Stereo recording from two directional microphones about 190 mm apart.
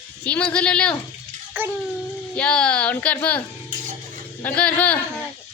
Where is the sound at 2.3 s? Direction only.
5° left (ahead or behind).